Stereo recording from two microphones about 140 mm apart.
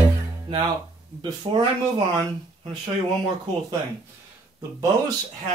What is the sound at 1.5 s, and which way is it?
Speech, 40° right (ahead or behind).